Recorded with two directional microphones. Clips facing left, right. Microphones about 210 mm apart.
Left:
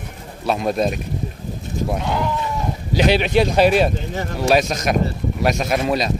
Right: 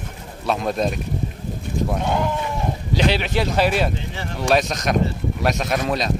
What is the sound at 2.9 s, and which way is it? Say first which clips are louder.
Speech: left 5 dB; 15° left (ahead or behind).